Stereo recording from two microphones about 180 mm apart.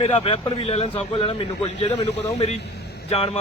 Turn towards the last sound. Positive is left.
turn(degrees=30)  # may be behind; listen again after turning